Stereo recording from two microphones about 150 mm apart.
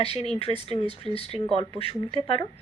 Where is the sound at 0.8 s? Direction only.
30° right (ahead or behind).